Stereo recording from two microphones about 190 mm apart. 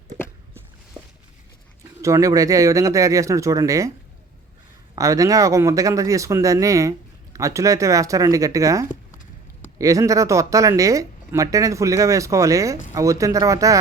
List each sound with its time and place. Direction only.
0.9 s a sound: 5° right (ahead or behind)
2.0 s speech: 15° right (ahead or behind)
4.9 s speech: 15° right (ahead or behind)